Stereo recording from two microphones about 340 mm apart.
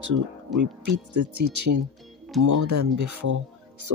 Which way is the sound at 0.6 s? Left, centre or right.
Right.